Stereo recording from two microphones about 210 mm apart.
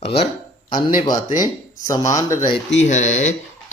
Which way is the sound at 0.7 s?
20° left (ahead or behind).